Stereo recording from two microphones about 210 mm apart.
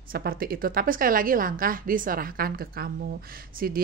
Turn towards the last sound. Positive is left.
turn(degrees=-45)  # may be behind; listen again after turning